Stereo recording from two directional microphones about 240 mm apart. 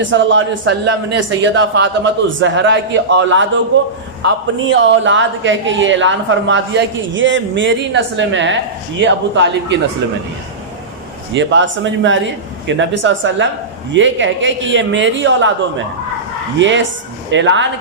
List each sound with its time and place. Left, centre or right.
0.1 s speech: right
11.3 s speech: right
16.6 s speech: right